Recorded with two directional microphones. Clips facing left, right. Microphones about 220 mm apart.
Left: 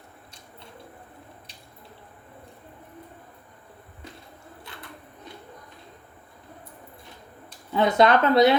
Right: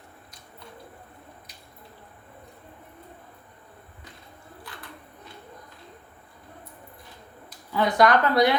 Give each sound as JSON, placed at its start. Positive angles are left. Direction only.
{"t": 7.7, "sound": "speech", "side_deg": 25}